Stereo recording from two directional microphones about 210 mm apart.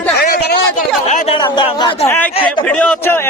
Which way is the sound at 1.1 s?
30° left (ahead or behind).